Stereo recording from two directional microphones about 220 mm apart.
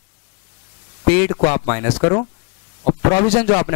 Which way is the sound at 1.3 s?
30° left (ahead or behind).